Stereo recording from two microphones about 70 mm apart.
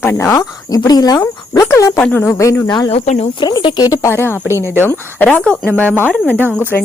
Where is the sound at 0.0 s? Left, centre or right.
Left.